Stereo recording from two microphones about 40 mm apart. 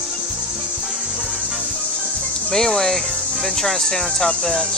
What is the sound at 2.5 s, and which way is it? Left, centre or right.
Speech, centre.